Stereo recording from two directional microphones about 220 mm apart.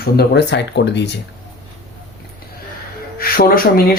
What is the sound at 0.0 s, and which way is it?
Speech, 50° left (ahead or behind).